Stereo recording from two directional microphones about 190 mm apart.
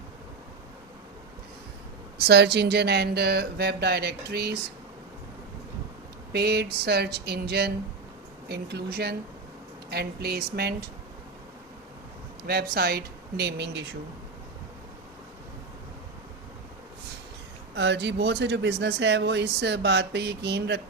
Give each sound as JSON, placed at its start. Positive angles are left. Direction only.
{"t": 2.1, "sound": "speech", "side_deg": -60}
{"t": 6.3, "sound": "speech", "side_deg": -55}
{"t": 12.4, "sound": "speech", "side_deg": -55}
{"t": 17.7, "sound": "speech", "side_deg": -60}